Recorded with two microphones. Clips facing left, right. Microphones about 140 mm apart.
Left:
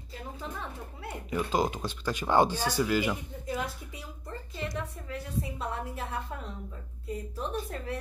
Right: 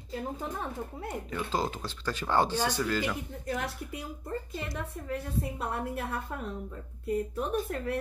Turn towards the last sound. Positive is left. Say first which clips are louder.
# right 4 dB
turn(degrees=-60)  # may be behind; listen again after turning